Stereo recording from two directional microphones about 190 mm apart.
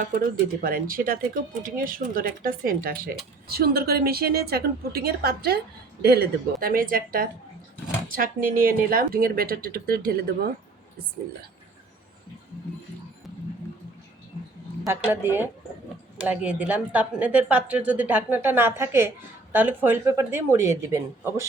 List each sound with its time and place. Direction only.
0.2 s speech: 50° right (ahead or behind)
14.8 s a woman's voice: 10° right (ahead or behind)